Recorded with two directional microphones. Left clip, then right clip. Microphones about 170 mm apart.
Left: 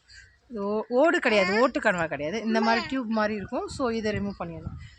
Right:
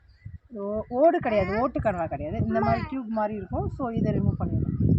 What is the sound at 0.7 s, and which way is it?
Speech, 20° left (ahead or behind).